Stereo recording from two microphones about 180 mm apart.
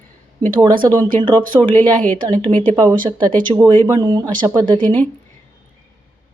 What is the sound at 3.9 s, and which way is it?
Speech, 20° right (ahead or behind).